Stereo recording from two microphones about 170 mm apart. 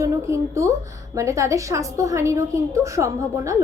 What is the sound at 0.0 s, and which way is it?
A woman's voice, 15° right (ahead or behind).